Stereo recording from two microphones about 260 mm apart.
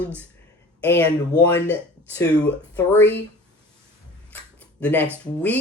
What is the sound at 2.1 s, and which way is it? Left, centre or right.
Speech, centre.